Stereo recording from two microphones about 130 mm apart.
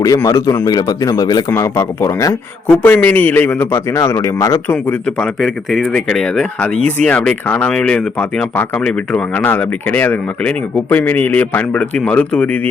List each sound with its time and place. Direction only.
0.0 s a man's voice: 25° left (ahead or behind)
4.7 s speech: 10° left (ahead or behind)